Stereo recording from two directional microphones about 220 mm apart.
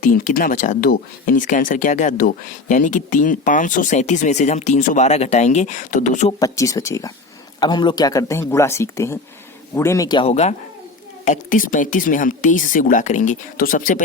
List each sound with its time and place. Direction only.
0.0 s speech: 35° left (ahead or behind)
6.4 s speech: 15° left (ahead or behind); by 14.0 s 35° left (ahead or behind)